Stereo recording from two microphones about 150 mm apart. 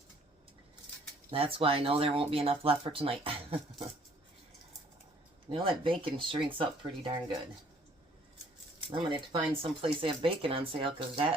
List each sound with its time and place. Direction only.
1.3 s speech: 40° right (ahead or behind)
5.5 s speech: 35° right (ahead or behind)
8.9 s speech: 35° right (ahead or behind)